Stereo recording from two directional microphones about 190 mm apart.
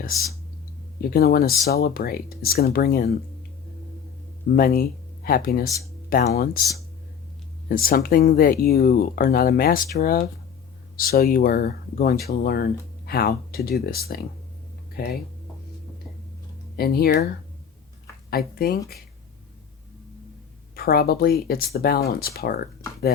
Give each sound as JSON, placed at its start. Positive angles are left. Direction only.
{"t": 1.1, "sound": "speech", "side_deg": 50}
{"t": 4.5, "sound": "speech", "side_deg": 50}
{"t": 7.7, "sound": "speech", "side_deg": 50}
{"t": 16.7, "sound": "speech", "side_deg": 55}
{"t": 18.3, "sound": "speech", "side_deg": 55}
{"t": 20.7, "sound": "speech", "side_deg": 55}